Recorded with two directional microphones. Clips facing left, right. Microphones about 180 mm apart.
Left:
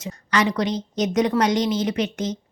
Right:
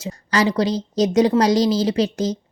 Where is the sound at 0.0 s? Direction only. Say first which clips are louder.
Right 2 dB; 35° right (ahead or behind).